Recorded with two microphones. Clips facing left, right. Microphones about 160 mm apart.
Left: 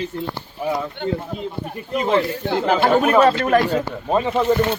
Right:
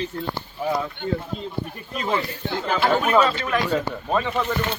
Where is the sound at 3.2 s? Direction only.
55° left (ahead or behind).